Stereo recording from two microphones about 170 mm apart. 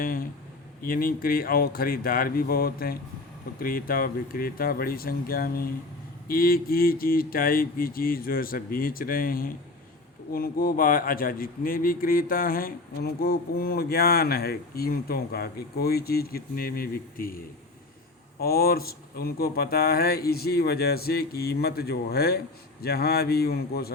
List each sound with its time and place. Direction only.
0.0 s speech: 60° left (ahead or behind)